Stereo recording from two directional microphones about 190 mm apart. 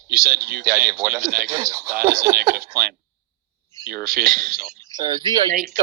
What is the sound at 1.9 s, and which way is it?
Speech, 50° right (ahead or behind).